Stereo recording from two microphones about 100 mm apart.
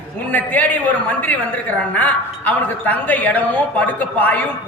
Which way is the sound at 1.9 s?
15° left (ahead or behind).